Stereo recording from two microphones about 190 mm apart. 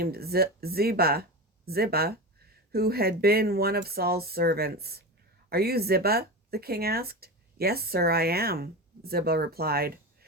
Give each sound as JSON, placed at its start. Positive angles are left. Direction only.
{"t": 0.0, "sound": "speech", "side_deg": -55}